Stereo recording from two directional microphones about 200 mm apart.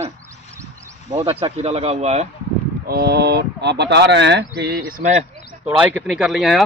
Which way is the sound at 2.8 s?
50° right (ahead or behind).